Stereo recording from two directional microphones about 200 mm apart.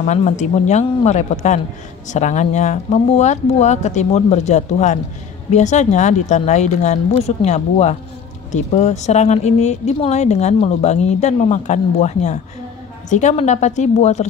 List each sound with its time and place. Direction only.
0.0 s speech: 35° left (ahead or behind)